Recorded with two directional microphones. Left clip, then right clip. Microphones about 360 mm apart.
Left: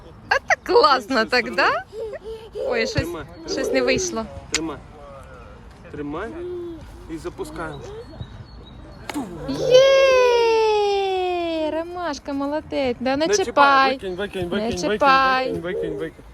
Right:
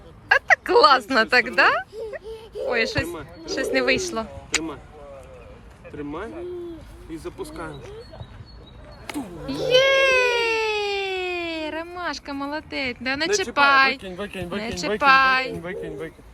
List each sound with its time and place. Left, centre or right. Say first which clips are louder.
0.3 s speech: right 2 dB; centre
6.0 s speech: left 3 dB; centre
9.0 s cat: left 3 dB; centre
14.1 s speech: left 5 dB; centre
14.9 s a woman's voice: even; centre